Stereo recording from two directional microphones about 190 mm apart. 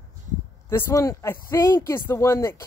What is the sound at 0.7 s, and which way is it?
Speech, 15° left (ahead or behind).